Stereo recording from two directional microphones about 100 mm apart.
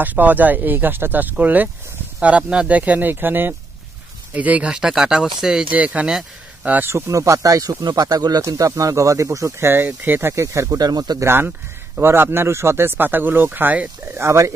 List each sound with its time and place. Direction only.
0.0 s speech: 15° right (ahead or behind); by 11.2 s 40° right (ahead or behind)
11.2 s speech: 20° right (ahead or behind)
14.2 s speech: 30° right (ahead or behind)